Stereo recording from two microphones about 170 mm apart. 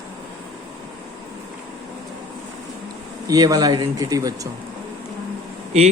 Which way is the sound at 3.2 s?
20° right (ahead or behind).